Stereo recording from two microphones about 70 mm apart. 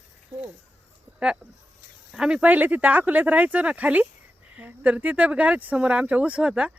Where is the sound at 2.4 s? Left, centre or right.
Right.